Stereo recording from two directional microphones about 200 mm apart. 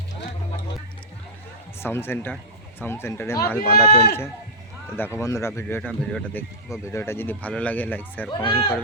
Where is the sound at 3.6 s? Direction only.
50° left (ahead or behind).